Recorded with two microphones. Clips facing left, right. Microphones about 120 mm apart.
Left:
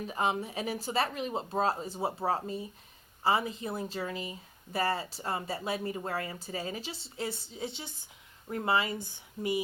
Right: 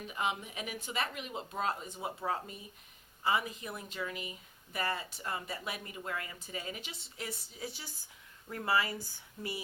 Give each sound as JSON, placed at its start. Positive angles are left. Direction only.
{"t": 0.1, "sound": "speech", "side_deg": 35}